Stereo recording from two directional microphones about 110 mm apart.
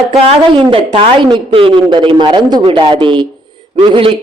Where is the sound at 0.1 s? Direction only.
60° right (ahead or behind).